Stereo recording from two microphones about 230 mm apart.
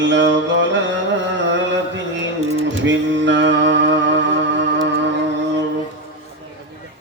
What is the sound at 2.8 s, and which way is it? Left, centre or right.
Music, right.